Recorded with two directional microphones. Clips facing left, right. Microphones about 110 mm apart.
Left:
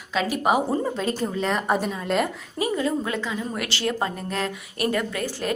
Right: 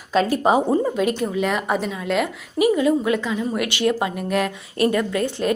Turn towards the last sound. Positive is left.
turn(degrees=-20)  # may be behind; listen again after turning